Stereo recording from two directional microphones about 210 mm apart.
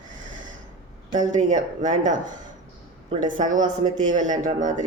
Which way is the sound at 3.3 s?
35° right (ahead or behind).